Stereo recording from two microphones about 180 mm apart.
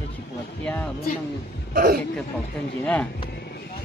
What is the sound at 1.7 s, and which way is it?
Speech, 50° right (ahead or behind).